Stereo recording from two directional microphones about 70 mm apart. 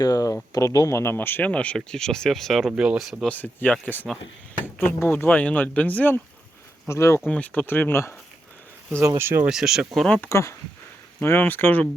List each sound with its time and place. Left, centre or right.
0.0 s speech: left
0.9 s speech: left
1.5 s speech: centre
3.2 s speech: left
6.8 s speech: left
7.3 s speech: left
9.1 s speech: right
9.5 s speech: centre
10.2 s speech: left
11.2 s speech: left